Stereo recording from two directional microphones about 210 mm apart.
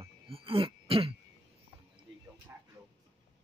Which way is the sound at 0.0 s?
25° right (ahead or behind).